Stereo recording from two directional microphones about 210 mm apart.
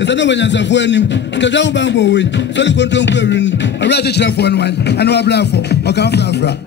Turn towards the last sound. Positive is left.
turn(degrees=55)  # may be behind; listen again after turning